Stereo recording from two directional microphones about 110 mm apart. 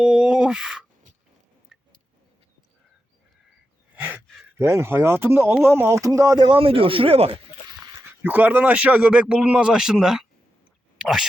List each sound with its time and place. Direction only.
0.0 s speech: 5° right (ahead or behind)
1.7 s tick-tock: 5° right (ahead or behind)
3.9 s gasp: 15° right (ahead or behind)
4.5 s speech: 25° right (ahead or behind)
6.4 s speech: 55° right (ahead or behind)
8.2 s a man's voice: 15° right (ahead or behind)